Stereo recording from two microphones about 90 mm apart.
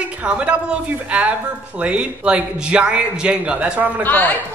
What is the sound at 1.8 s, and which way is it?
A woman's voice, 10° right (ahead or behind).